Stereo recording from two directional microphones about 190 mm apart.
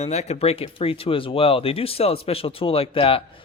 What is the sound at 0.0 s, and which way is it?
Speech, 35° left (ahead or behind).